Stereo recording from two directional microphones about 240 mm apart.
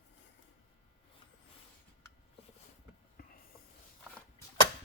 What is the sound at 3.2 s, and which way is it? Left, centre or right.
Snoring, left.